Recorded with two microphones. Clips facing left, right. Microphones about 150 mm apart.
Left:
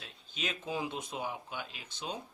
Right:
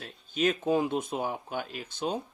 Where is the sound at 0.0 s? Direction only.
50° right (ahead or behind).